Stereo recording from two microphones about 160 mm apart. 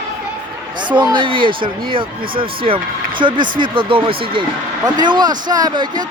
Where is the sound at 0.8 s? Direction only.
30° right (ahead or behind).